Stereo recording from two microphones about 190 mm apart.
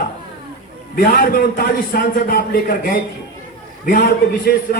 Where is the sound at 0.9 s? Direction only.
50° left (ahead or behind).